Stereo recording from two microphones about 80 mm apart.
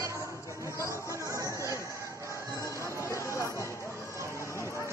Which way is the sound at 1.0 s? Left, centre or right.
Right.